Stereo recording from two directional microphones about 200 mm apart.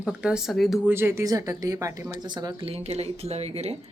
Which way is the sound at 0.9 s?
15° right (ahead or behind).